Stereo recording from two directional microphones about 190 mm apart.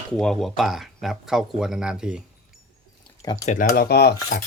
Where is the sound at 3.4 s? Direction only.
45° left (ahead or behind).